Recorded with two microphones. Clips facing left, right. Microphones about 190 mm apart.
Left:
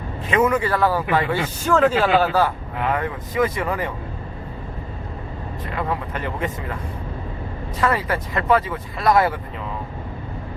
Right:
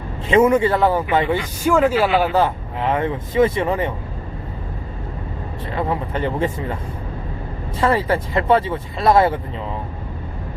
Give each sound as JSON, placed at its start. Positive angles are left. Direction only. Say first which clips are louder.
{"t": 0.3, "sound": "speech", "louder": "right 5 dB", "side_deg": -25}
{"t": 1.6, "sound": "speech", "louder": "right 2 dB", "side_deg": -10}
{"t": 5.7, "sound": "speech", "louder": "right 4 dB", "side_deg": -30}
{"t": 7.8, "sound": "speech", "louder": "right 4 dB", "side_deg": -30}